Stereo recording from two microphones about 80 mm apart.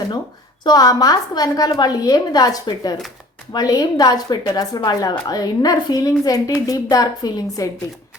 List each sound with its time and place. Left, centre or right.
0.6 s a woman's voice: left